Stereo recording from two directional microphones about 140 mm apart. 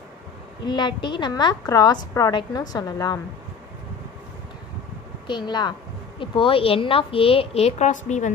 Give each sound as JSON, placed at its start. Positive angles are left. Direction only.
{"t": 0.7, "sound": "a woman's voice", "side_deg": 35}
{"t": 5.2, "sound": "a woman's voice", "side_deg": 35}